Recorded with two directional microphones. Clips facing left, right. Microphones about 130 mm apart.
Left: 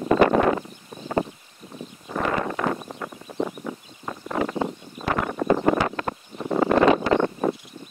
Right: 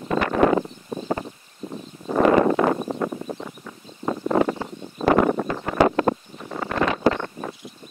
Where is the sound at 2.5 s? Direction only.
35° right (ahead or behind).